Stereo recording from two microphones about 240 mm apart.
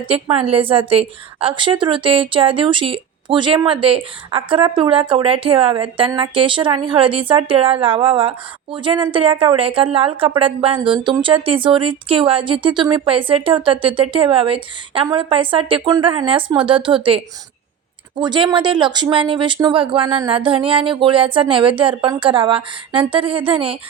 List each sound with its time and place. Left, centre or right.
0.1 s a woman's voice: right
18.2 s a woman's voice: centre